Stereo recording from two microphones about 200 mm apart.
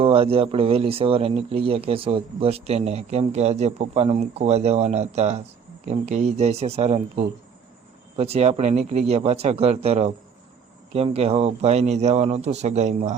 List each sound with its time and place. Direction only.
0.0 s a man's voice: 30° right (ahead or behind)